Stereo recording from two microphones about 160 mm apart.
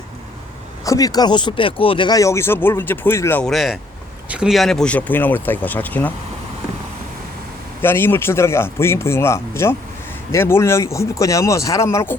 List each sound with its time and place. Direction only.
0.9 s speech: 20° left (ahead or behind)
3.4 s speech: centre (ahead or behind)
7.8 s speech: 15° left (ahead or behind)